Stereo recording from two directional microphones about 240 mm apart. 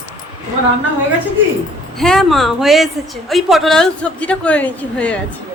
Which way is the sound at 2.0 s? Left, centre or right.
Centre.